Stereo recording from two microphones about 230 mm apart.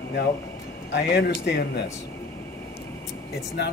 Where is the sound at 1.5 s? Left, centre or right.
Left.